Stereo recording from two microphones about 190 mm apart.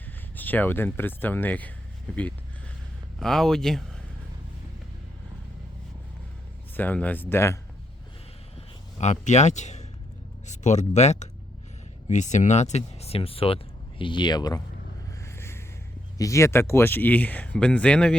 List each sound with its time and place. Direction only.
0.3 s speech: 10° left (ahead or behind)
6.7 s speech: 10° left (ahead or behind)
8.5 s a man's voice: 35° left (ahead or behind); by 14.6 s 20° left (ahead or behind)
15.2 s music: 15° left (ahead or behind)
16.1 s speech: 15° left (ahead or behind)